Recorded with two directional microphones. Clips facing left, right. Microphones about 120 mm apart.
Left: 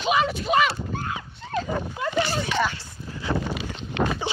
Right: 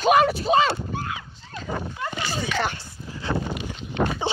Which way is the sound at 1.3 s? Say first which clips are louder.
Left 10 dB; 70° left (ahead or behind).